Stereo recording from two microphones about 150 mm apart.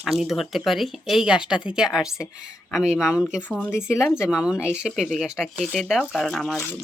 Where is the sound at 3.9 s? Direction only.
15° left (ahead or behind).